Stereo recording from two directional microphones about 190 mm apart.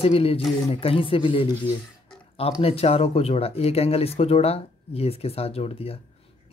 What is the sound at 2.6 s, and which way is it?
Speech, 30° left (ahead or behind).